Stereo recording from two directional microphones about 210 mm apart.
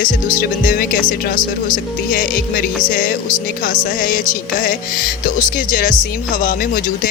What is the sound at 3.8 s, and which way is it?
Speech, 40° left (ahead or behind).